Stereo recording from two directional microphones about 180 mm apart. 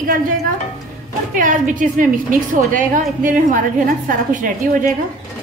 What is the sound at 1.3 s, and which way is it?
A woman's voice, 45° right (ahead or behind).